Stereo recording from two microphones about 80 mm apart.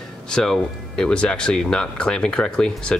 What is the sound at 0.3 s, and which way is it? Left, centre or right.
Speech, centre.